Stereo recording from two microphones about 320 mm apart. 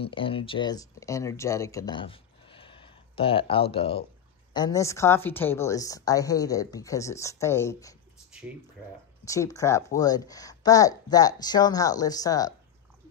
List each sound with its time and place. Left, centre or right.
0.0 s speech: centre
9.2 s speech: centre